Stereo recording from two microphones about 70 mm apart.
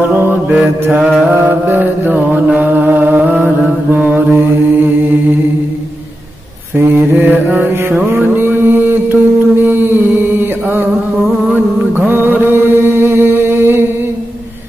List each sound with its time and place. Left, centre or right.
0.1 s mantra: right
6.7 s mantra: right
12.1 s mantra: right